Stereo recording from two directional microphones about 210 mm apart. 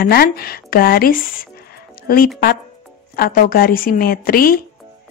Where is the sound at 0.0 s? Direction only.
45° left (ahead or behind).